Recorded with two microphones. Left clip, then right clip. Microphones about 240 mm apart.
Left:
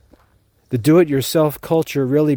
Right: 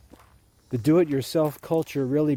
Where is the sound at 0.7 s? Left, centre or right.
Left.